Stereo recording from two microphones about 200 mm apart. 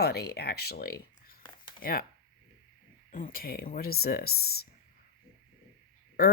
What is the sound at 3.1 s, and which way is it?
Speech, 45° left (ahead or behind).